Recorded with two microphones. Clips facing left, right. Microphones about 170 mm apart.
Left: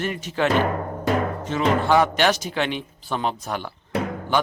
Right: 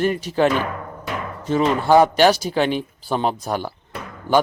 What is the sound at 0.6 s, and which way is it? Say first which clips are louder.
Music: left 5 dB; 45° left (ahead or behind).